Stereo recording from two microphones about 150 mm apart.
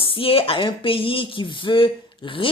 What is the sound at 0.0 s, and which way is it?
Speech, 40° left (ahead or behind).